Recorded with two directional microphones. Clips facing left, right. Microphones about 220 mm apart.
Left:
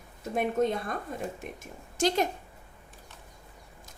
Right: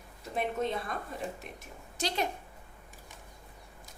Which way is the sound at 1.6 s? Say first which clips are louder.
Left 10 dB; 45° left (ahead or behind).